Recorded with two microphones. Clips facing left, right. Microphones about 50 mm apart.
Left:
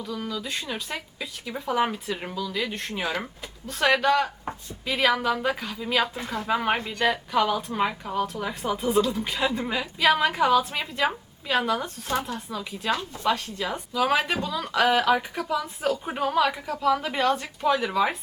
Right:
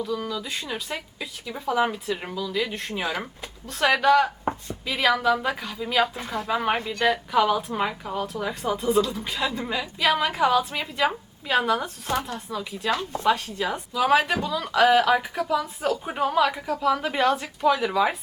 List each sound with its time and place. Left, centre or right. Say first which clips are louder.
0.0 s a woman's voice: right 3 dB; centre